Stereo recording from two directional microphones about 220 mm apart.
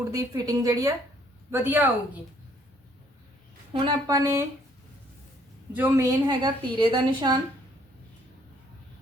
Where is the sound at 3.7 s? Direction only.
20° right (ahead or behind).